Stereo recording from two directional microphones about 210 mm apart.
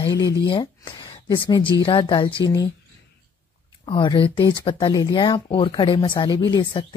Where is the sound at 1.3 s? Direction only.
25° left (ahead or behind).